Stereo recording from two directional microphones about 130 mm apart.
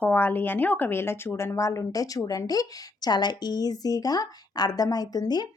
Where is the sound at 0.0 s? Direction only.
15° left (ahead or behind).